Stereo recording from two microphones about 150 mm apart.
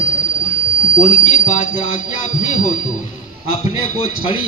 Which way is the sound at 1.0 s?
55° left (ahead or behind).